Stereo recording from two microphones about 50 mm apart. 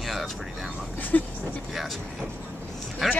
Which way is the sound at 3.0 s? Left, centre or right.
Centre.